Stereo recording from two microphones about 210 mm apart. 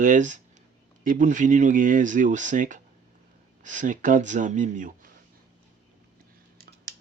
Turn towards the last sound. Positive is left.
turn(degrees=-40)  # may be behind; listen again after turning